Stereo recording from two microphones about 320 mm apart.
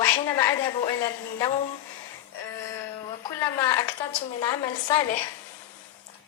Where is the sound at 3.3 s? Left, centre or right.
Centre.